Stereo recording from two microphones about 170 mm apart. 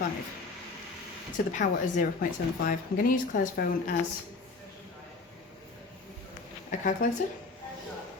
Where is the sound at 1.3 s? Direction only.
50° left (ahead or behind).